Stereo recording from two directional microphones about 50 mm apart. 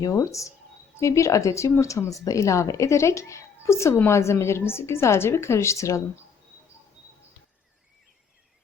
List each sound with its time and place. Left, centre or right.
0.1 s a woman's voice: left